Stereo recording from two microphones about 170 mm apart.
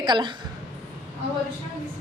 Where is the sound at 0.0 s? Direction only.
25° right (ahead or behind).